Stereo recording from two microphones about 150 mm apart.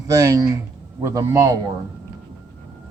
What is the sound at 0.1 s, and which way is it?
A man's voice, 20° right (ahead or behind).